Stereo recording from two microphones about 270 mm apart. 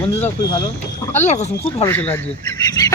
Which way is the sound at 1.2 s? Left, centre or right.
Left.